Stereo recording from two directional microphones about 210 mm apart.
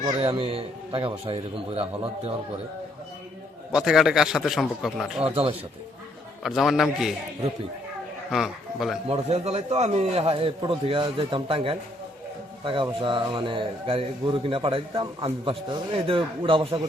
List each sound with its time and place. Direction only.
0.0 s speech: 25° right (ahead or behind)
3.7 s a man's voice: centre (ahead or behind)
5.2 s speech: 25° right (ahead or behind)
6.4 s a man's voice: centre (ahead or behind)
8.3 s a man's voice: centre (ahead or behind)
9.0 s speech: 30° right (ahead or behind)